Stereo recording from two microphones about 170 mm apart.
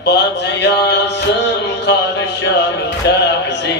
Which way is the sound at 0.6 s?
90° left.